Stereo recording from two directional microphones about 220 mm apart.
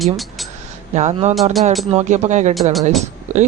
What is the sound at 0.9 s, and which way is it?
Speech, 30° right (ahead or behind).